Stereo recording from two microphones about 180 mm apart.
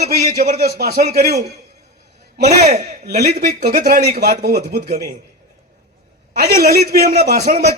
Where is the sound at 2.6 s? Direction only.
40° right (ahead or behind).